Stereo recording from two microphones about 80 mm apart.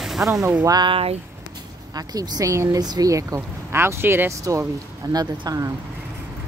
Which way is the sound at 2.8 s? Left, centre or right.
Right.